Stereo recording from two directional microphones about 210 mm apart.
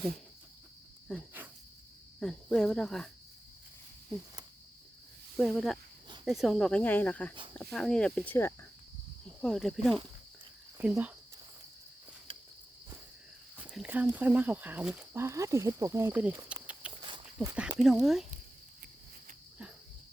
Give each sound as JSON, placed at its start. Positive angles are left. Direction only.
{"t": 1.0, "sound": "speech", "side_deg": -5}
{"t": 5.4, "sound": "speech", "side_deg": 0}
{"t": 9.4, "sound": "speech", "side_deg": 0}
{"t": 13.6, "sound": "speech", "side_deg": -5}
{"t": 17.0, "sound": "dog", "side_deg": -20}
{"t": 17.5, "sound": "speech", "side_deg": -5}